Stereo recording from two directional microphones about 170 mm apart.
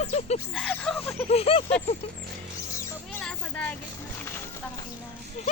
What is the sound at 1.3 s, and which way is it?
Speech, 35° left (ahead or behind).